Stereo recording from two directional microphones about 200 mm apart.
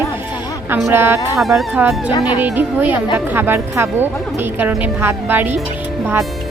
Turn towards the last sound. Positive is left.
turn(degrees=-10)  # may be behind; listen again after turning